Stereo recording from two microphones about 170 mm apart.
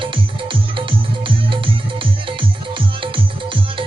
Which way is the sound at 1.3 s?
30° right (ahead or behind).